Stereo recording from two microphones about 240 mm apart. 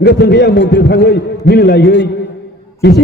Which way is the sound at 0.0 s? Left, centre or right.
Left.